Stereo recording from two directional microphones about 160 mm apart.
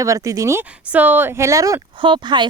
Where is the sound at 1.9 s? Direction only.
30° right (ahead or behind).